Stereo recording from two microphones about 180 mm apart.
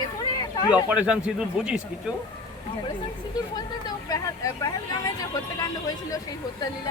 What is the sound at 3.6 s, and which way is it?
Speech, 20° left (ahead or behind).